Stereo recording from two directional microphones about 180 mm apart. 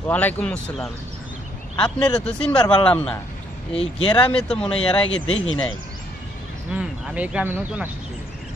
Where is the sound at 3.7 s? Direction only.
35° left (ahead or behind).